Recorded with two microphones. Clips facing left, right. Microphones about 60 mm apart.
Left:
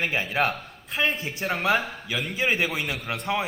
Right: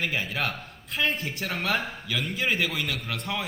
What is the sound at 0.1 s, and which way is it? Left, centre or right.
A man's voice, left.